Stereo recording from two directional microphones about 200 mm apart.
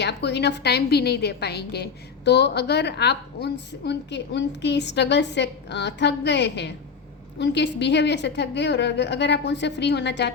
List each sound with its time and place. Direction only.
0.0 s a woman's voice: 55° left (ahead or behind)